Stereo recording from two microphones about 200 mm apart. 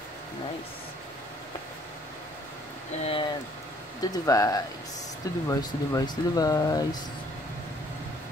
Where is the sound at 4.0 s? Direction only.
20° left (ahead or behind).